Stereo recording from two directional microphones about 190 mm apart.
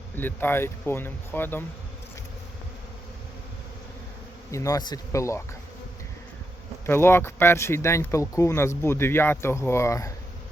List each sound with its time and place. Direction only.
0.2 s speech: 10° left (ahead or behind)
4.5 s speech: 20° left (ahead or behind)
6.8 s speech: 10° left (ahead or behind)